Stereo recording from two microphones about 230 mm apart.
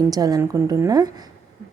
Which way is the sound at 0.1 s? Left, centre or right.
Centre.